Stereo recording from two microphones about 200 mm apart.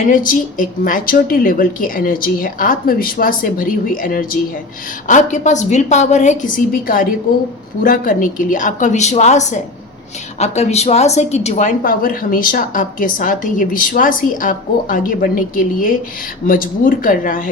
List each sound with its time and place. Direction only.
0.1 s a woman's voice: 40° left (ahead or behind)